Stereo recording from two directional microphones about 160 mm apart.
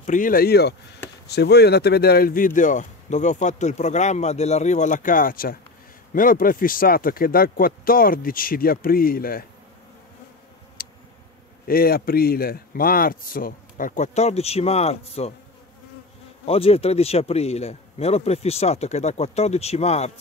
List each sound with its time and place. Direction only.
0.0 s a man's voice: 55° left (ahead or behind)
10.8 s a sound: 65° left (ahead or behind)
11.6 s a man's voice: 65° left (ahead or behind); by 15.3 s 40° left (ahead or behind)
16.4 s a man's voice: 35° left (ahead or behind)